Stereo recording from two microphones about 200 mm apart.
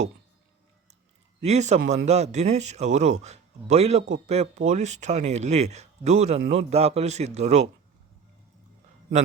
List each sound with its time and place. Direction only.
1.4 s a man's voice: 35° right (ahead or behind)